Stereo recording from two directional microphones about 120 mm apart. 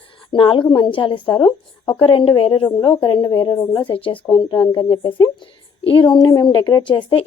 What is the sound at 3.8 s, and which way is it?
A woman's voice, 45° left (ahead or behind).